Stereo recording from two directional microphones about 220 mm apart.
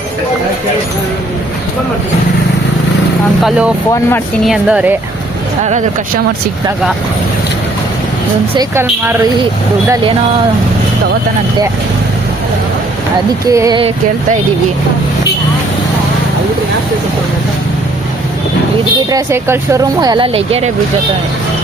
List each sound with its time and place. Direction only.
3.4 s a woman's voice: 5° right (ahead or behind)
8.5 s speech: 10° right (ahead or behind)
13.5 s speech: 15° right (ahead or behind)
19.1 s speech: 15° right (ahead or behind)